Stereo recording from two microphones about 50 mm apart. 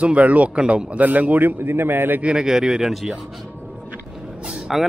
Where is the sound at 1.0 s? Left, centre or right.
Right.